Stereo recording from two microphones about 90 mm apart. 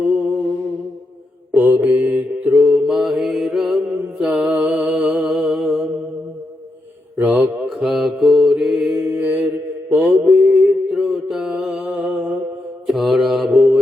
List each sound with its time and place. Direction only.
0.0 s music: 15° right (ahead or behind)
1.5 s mantra: 20° right (ahead or behind)
2.8 s mantra: 5° right (ahead or behind)
7.2 s mantra: 20° right (ahead or behind)
7.5 s mantra: 10° right (ahead or behind)
9.1 s mantra: 20° right (ahead or behind)
10.5 s mantra: 5° right (ahead or behind)
11.8 s music: 15° right (ahead or behind)
12.9 s mantra: centre (ahead or behind)